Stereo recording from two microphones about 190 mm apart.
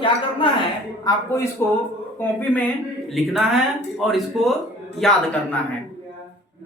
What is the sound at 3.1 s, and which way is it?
Speech, centre (ahead or behind).